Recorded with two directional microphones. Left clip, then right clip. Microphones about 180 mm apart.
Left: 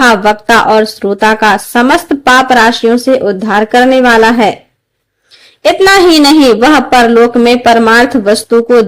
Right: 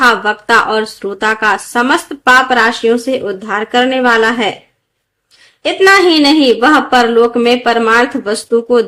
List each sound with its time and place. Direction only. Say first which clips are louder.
0.0 s speech: left 4 dB; 40° left (ahead or behind)
5.8 s speech: left 2 dB; 45° left (ahead or behind)